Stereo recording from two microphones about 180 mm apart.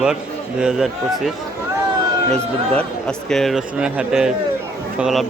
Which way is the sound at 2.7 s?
5° left (ahead or behind).